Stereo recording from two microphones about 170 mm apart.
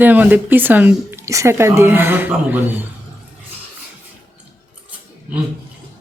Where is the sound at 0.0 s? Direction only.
10° right (ahead or behind).